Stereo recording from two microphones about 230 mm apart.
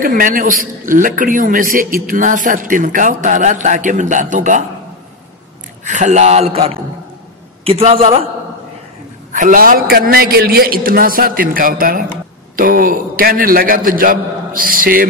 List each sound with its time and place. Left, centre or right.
0.0 s a man's voice: right
5.9 s speech: right
9.3 s a man's voice: right